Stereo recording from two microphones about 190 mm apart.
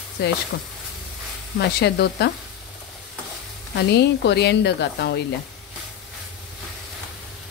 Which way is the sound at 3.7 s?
60° left (ahead or behind).